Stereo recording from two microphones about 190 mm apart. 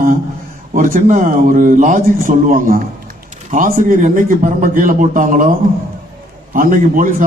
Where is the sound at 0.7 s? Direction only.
45° right (ahead or behind).